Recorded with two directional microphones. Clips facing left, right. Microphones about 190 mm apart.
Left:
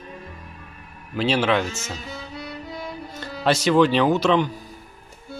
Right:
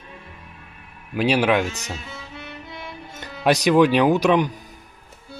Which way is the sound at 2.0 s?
35° left (ahead or behind).